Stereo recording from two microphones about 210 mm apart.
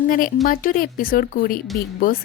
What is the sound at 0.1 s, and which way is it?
A woman's voice, 40° left (ahead or behind).